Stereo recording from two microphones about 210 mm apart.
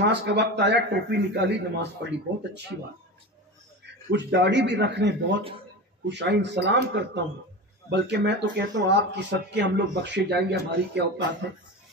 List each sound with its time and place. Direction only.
0.0 s speech: 55° right (ahead or behind)
3.8 s speech: 55° right (ahead or behind)